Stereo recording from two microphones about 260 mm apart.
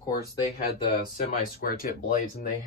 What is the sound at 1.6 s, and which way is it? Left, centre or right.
Speech, left.